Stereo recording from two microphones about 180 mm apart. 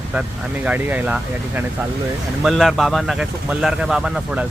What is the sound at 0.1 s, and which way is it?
Speech, 5° right (ahead or behind).